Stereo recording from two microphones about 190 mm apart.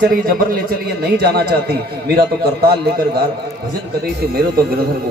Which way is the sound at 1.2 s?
55° right (ahead or behind).